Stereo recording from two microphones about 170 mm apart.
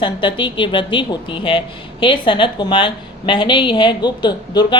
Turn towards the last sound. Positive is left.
turn(degrees=25)  # may be behind; listen again after turning